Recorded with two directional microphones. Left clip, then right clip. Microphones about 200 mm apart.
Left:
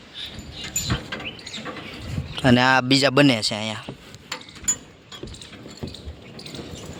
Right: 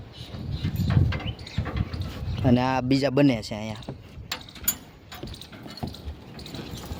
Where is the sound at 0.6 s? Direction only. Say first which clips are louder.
Left 4 dB; 35° left (ahead or behind).